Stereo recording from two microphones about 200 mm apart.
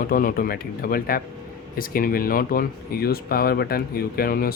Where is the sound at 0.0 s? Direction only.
45° left (ahead or behind).